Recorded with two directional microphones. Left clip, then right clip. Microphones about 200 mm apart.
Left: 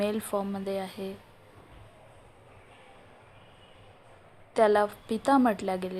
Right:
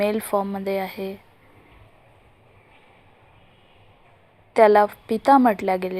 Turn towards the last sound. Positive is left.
turn(degrees=-20)  # may be behind; listen again after turning